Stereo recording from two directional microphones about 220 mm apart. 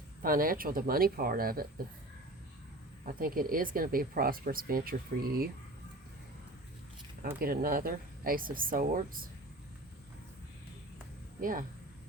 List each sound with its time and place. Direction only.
0.2 s speech: 40° right (ahead or behind)
3.1 s speech: 40° right (ahead or behind)
7.3 s speech: 40° right (ahead or behind)
11.3 s speech: 40° right (ahead or behind)